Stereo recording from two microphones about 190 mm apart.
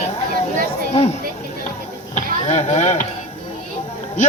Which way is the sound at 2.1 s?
40° left (ahead or behind).